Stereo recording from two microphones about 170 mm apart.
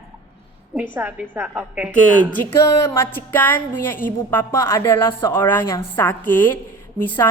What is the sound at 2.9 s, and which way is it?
Speech, 15° left (ahead or behind).